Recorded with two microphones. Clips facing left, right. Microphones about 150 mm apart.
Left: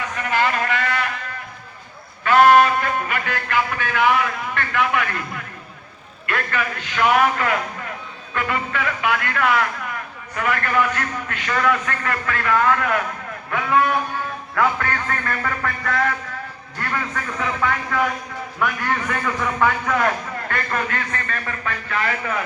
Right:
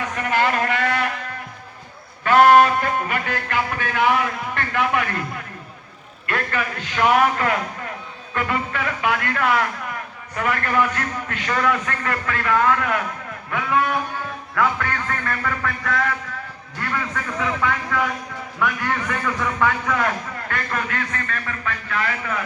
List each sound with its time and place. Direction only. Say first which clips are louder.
0.2 s a sound: right 1 dB; 50° right (ahead or behind)
2.2 s a man's voice: even; 40° right (ahead or behind); by 13.0 s 20° right (ahead or behind)
14.5 s a man's voice: left 1 dB; 5° left (ahead or behind)